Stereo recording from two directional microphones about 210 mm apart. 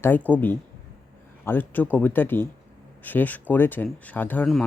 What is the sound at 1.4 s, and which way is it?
Speech, 10° left (ahead or behind).